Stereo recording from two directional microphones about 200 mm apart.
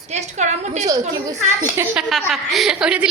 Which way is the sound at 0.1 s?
35° right (ahead or behind).